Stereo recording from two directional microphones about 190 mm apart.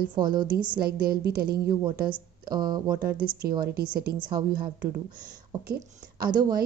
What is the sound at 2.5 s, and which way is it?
Speech, 20° right (ahead or behind).